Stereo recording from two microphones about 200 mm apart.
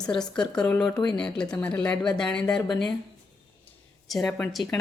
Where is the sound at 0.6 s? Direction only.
5° left (ahead or behind).